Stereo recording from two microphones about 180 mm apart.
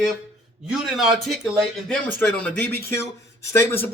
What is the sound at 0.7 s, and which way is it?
A man's voice, centre (ahead or behind).